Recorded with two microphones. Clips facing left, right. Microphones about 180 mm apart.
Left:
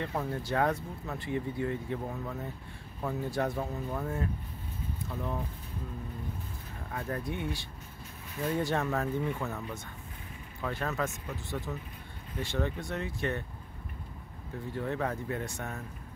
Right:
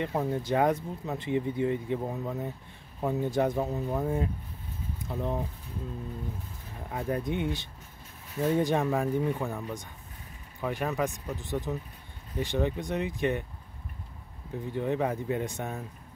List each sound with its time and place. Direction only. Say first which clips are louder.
0.0 s speech: right 4 dB; 20° right (ahead or behind)
6.9 s speech: right 5 dB; 20° right (ahead or behind)
14.7 s speech: right 4 dB; 15° right (ahead or behind)